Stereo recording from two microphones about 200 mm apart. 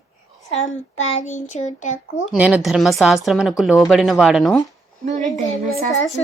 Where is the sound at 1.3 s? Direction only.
35° left (ahead or behind).